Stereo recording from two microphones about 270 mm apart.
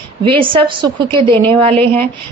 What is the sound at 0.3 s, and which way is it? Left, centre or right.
A woman's voice, centre.